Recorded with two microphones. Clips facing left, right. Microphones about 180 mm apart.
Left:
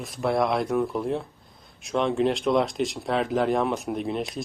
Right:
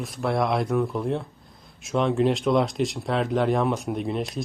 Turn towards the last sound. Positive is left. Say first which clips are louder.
# right 1 dB
turn(degrees=0)  # may be behind; listen again after turning